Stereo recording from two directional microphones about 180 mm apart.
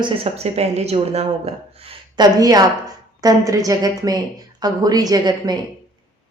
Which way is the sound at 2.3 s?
20° right (ahead or behind).